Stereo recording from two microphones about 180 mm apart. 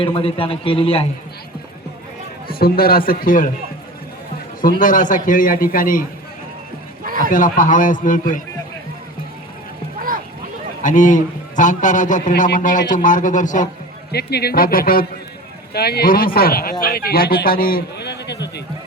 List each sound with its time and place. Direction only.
0.0 s a man's voice: 30° left (ahead or behind)
2.5 s a man's voice: 55° left (ahead or behind)
4.8 s a man's voice: 45° left (ahead or behind)
7.0 s a sound: 50° right (ahead or behind)
7.3 s a man's voice: 50° left (ahead or behind)
10.8 s a man's voice: 45° left (ahead or behind)
14.1 s a man's voice: 65° left (ahead or behind)